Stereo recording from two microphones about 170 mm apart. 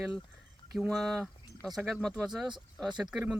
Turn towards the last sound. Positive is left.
turn(degrees=-5)  # may be behind; listen again after turning